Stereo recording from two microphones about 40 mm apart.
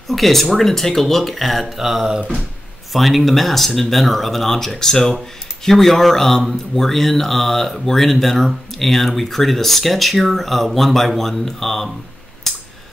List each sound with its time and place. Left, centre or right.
0.1 s speech: centre